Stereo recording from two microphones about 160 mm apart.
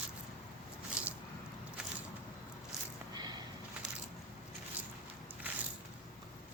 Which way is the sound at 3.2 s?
25° right (ahead or behind).